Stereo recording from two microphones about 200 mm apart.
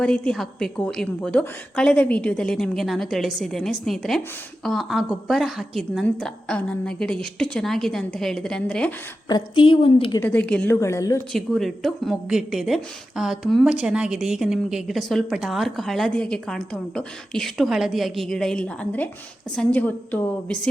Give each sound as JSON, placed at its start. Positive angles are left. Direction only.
{"t": 0.0, "sound": "speech", "side_deg": 5}
{"t": 9.3, "sound": "a woman's voice", "side_deg": 25}
{"t": 10.2, "sound": "a woman's voice", "side_deg": 10}
{"t": 11.3, "sound": "a woman's voice", "side_deg": 0}